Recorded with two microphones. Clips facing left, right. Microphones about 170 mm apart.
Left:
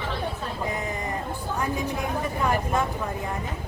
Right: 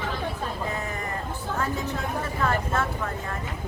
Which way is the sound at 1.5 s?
15° left (ahead or behind).